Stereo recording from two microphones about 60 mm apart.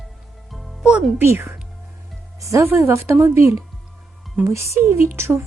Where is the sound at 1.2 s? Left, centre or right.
Right.